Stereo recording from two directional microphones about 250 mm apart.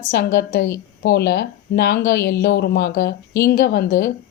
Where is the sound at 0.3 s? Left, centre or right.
Left.